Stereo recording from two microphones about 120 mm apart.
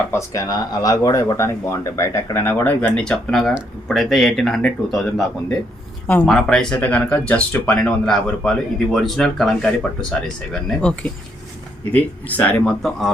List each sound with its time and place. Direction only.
0.1 s speech: 25° left (ahead or behind)
3.0 s speech: 5° left (ahead or behind)